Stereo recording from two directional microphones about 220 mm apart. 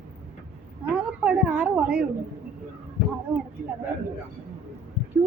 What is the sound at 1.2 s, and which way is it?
Speech, 5° right (ahead or behind).